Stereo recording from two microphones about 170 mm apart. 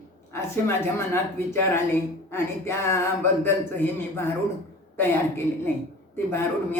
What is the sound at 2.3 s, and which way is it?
A man's voice, 15° left (ahead or behind).